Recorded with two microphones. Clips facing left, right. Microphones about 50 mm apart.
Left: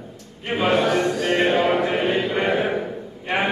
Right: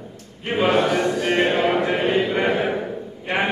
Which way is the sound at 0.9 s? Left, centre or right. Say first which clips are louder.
Even; centre.